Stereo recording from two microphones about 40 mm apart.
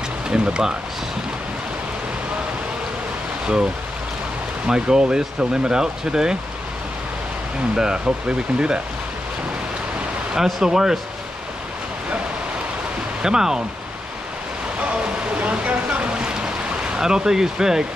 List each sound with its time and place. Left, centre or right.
0.3 s speech: centre
4.6 s speech: centre
7.7 s speech: centre
10.3 s speech: centre
13.2 s speech: centre
14.9 s boat: right; by 17.8 s centre